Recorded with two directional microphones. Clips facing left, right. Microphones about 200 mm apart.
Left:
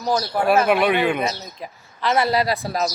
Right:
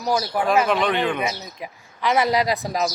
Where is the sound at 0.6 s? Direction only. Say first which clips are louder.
Left 3 dB; 10° left (ahead or behind).